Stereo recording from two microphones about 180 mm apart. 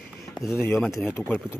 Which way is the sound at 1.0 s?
10° left (ahead or behind).